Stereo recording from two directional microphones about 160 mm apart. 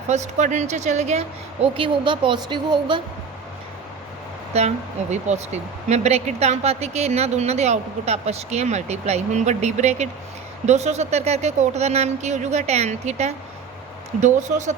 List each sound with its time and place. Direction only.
0.1 s speech: 45° right (ahead or behind)
1.6 s a woman's voice: 35° right (ahead or behind)
5.1 s speech: 45° right (ahead or behind)